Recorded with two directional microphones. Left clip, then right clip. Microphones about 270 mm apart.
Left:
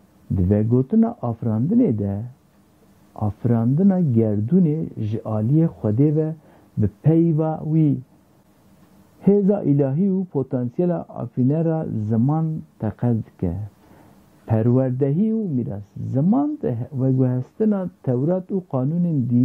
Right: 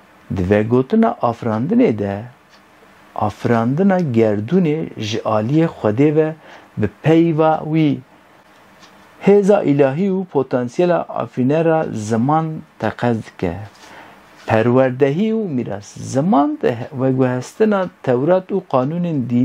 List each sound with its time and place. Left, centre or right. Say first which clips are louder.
0.3 s speech: right 6 dB; centre
9.2 s speech: right 7 dB; centre
10.1 s speech: right 6 dB; right
10.5 s speech: right 9 dB; centre